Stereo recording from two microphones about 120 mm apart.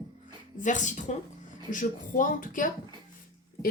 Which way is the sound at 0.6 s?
90° left.